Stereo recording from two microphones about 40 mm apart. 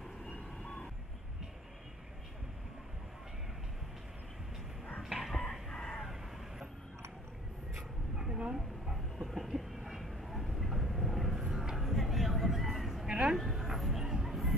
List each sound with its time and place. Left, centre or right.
0.6 s vehicle: centre
5.3 s chicken: centre
7.7 s writing: centre
8.5 s a sound: centre
9.8 s vehicle: centre
12.4 s music: centre
13.0 s a sound: centre
13.4 s music: centre